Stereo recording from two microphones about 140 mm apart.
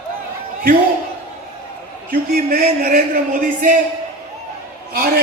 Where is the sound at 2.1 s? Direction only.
90° right; by 3.8 s 75° right (ahead or behind).